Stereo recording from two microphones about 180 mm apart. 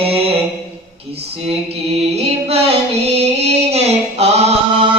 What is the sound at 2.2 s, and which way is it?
Music, 35° right (ahead or behind).